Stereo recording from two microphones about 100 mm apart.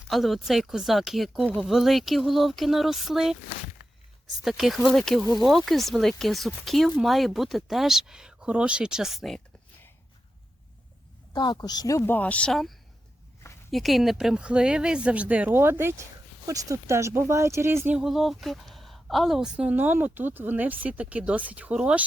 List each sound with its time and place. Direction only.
0.1 s speech: centre (ahead or behind)
11.3 s speech: 45° left (ahead or behind)
12.1 s a woman's voice: 15° left (ahead or behind); by 17.9 s 25° right (ahead or behind)
17.9 s a woman's voice: 5° right (ahead or behind)